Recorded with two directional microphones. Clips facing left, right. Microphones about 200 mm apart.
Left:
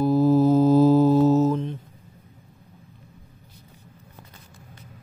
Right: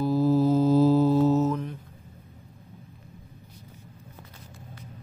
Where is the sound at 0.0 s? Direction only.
55° left (ahead or behind).